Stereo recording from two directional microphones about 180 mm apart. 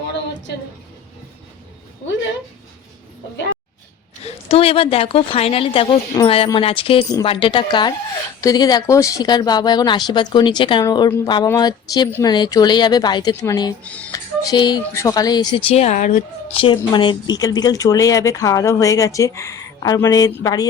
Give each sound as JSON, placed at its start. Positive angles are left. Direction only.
{"t": 4.3, "sound": "speech", "side_deg": 35}
{"t": 13.8, "sound": "speech", "side_deg": 5}
{"t": 14.1, "sound": "speech", "side_deg": 20}
{"t": 15.7, "sound": "speech", "side_deg": 40}
{"t": 16.6, "sound": "speech", "side_deg": 25}